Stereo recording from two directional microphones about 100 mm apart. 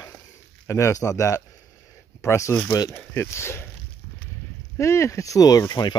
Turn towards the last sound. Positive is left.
turn(degrees=40)  # may be behind; listen again after turning